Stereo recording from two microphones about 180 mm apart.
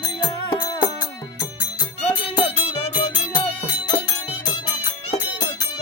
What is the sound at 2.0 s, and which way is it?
Music, 35° left (ahead or behind).